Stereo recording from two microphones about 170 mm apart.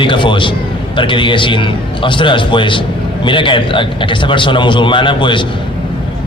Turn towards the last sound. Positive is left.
turn(degrees=30)  # may be behind; listen again after turning